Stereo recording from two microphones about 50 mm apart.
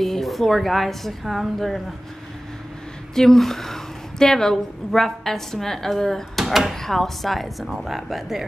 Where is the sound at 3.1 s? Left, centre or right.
Centre.